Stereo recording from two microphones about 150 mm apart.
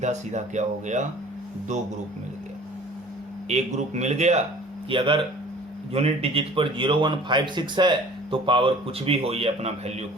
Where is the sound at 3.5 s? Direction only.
50° right (ahead or behind).